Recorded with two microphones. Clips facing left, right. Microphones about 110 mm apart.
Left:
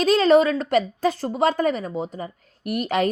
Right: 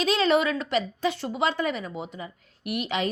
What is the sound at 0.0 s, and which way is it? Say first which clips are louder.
A woman's voice: left 6 dB; 40° left (ahead or behind).